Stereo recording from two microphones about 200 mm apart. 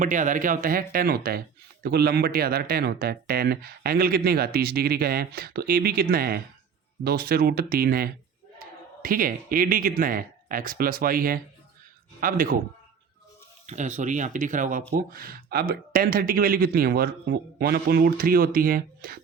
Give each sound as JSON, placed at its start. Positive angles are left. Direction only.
{"t": 0.0, "sound": "speech", "side_deg": -40}
{"t": 13.7, "sound": "speech", "side_deg": -35}